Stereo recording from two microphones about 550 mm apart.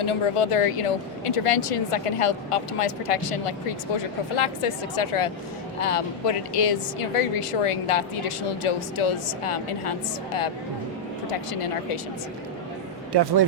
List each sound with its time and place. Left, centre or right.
0.0 s speech: left
11.3 s speech: left
13.1 s speech: right